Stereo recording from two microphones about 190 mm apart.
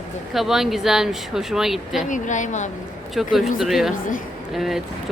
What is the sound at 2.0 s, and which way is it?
Speech, 40° left (ahead or behind).